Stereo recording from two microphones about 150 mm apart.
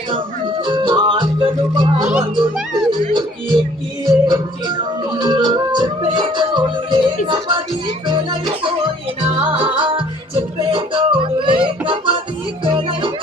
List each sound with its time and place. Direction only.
0.1 s music: 30° right (ahead or behind)
2.9 s music: 30° right (ahead or behind)